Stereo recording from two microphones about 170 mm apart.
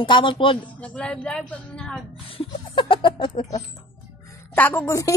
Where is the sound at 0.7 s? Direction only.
5° left (ahead or behind).